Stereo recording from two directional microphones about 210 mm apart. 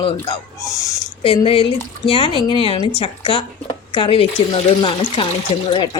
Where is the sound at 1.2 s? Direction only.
25° left (ahead or behind).